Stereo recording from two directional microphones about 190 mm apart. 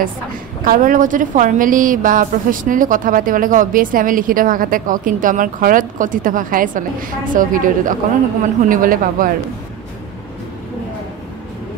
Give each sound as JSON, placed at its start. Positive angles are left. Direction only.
{"t": 0.7, "sound": "a woman's voice", "side_deg": -45}